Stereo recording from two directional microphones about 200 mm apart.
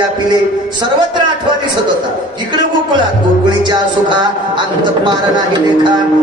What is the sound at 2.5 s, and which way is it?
Speech, 20° right (ahead or behind).